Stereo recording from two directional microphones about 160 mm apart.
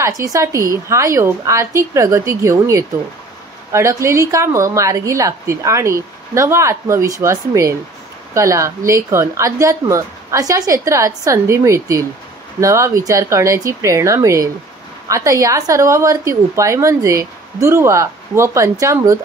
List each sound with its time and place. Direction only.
0.0 s a woman's voice: 20° right (ahead or behind)